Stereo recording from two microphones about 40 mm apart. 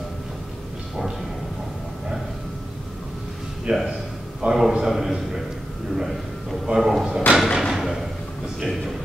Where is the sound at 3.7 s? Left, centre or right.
Right.